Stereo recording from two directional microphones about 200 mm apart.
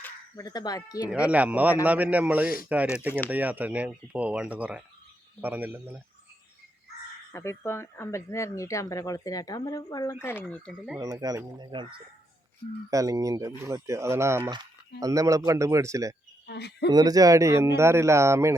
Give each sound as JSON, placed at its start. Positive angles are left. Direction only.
{"t": 0.0, "sound": "speech", "side_deg": 15}
{"t": 1.1, "sound": "speech", "side_deg": -5}
{"t": 7.3, "sound": "speech", "side_deg": 15}
{"t": 10.9, "sound": "speech", "side_deg": -20}
{"t": 16.5, "sound": "speech", "side_deg": 55}
{"t": 16.9, "sound": "speech", "side_deg": -20}